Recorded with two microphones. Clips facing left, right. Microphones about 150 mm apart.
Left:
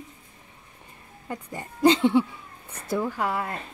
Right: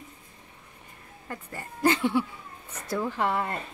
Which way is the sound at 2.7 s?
10° left (ahead or behind).